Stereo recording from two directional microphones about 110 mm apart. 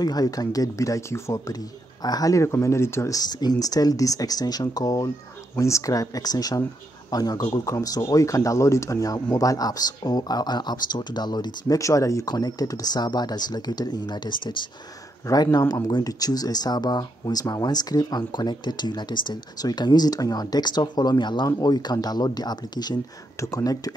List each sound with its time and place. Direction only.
0.0 s speech: 35° left (ahead or behind)